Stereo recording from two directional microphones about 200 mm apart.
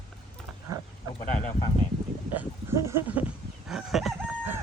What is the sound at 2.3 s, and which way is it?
Speech, 10° right (ahead or behind).